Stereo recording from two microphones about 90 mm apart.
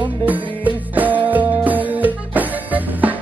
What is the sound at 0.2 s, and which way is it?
Music, 20° right (ahead or behind).